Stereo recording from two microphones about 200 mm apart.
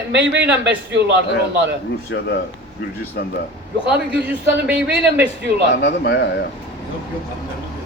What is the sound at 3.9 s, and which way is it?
Speech, 5° right (ahead or behind).